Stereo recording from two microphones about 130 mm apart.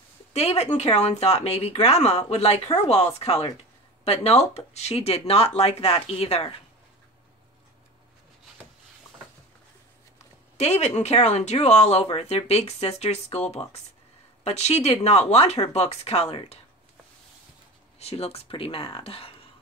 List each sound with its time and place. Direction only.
0.3 s speech: 55° left (ahead or behind)
10.6 s speech: 55° left (ahead or behind)
17.9 s speech: 50° left (ahead or behind)